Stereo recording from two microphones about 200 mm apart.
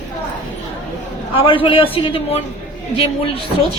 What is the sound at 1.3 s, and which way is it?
A woman's voice, 25° left (ahead or behind).